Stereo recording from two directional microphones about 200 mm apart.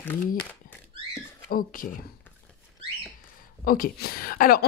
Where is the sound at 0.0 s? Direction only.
10° left (ahead or behind).